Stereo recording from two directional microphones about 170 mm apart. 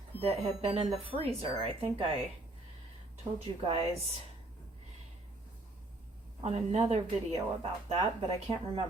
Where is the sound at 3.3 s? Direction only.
40° right (ahead or behind).